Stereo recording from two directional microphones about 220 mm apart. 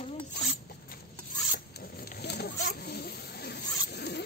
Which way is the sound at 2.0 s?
45° left (ahead or behind).